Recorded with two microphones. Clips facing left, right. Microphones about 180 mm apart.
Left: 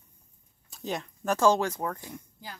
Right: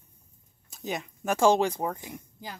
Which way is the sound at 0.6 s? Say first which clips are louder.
Even; centre (ahead or behind).